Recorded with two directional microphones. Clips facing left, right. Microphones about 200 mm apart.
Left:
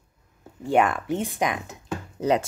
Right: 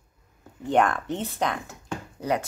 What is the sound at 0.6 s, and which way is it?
Speech, 5° left (ahead or behind).